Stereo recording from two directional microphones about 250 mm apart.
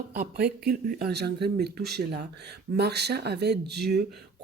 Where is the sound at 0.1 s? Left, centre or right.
Right.